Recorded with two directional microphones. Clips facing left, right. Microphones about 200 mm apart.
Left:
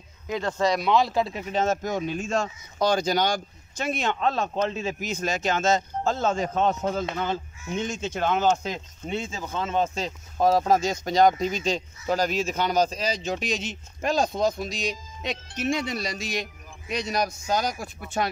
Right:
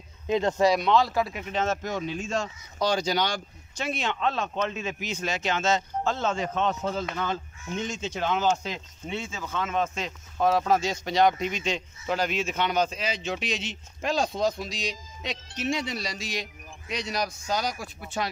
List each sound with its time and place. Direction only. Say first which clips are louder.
0.3 s speech: right 3 dB; 20° right (ahead or behind)
0.7 s speech: left 1 dB; centre (ahead or behind)
0.9 s speech: left 1 dB; 20° left (ahead or behind)
1.5 s speech: left 3 dB; 40° left (ahead or behind)
8.5 s speech: left 3 dB; 40° left (ahead or behind)